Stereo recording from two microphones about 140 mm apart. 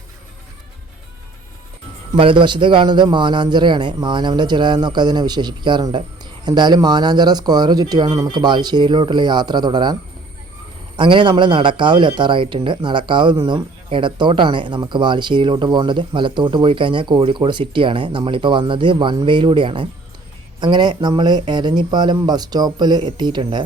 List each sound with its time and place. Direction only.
2.1 s speech: 35° right (ahead or behind)